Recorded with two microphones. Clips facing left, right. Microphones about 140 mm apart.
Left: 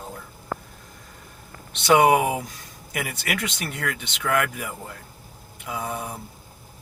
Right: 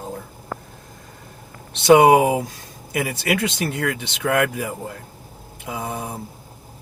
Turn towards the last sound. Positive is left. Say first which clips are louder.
# right 2 dB
turn(degrees=-30)  # may be behind; listen again after turning